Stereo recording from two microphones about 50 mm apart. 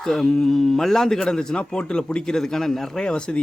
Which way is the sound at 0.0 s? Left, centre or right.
Centre.